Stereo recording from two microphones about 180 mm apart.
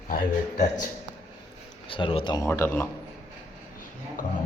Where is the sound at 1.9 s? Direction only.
30° left (ahead or behind); by 2.8 s 10° left (ahead or behind).